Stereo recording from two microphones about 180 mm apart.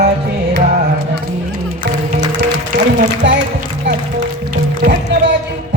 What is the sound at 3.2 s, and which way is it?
Speech, 75° right (ahead or behind).